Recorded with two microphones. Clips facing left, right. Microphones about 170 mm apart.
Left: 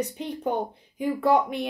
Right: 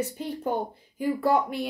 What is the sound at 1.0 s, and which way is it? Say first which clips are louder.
Speech: left 2 dB; 5° right (ahead or behind).